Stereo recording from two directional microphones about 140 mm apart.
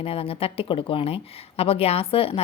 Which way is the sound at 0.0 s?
45° left (ahead or behind).